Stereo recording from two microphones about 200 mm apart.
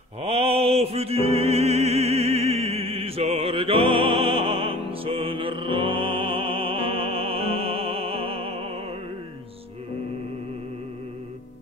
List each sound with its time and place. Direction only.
0.2 s music: 30° right (ahead or behind)